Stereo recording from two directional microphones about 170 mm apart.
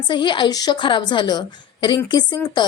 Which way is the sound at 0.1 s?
30° left (ahead or behind).